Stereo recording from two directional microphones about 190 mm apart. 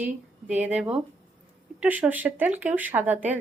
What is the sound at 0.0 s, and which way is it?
A woman's voice, 10° right (ahead or behind).